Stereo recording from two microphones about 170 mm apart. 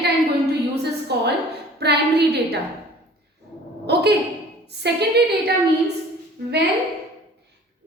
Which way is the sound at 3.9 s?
75° right (ahead or behind).